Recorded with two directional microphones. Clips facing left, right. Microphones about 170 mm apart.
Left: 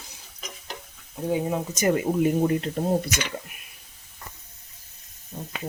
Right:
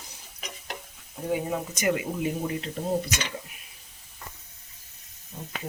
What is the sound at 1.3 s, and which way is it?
Speech, 25° left (ahead or behind).